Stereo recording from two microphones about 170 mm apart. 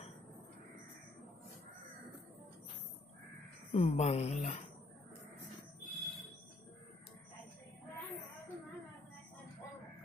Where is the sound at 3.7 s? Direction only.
40° left (ahead or behind).